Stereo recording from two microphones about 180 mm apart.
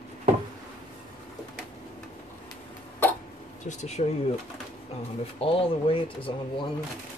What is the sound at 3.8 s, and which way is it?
Speech, 35° left (ahead or behind).